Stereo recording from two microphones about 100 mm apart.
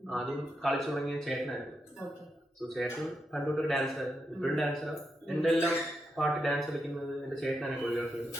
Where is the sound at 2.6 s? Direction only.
Centre (ahead or behind).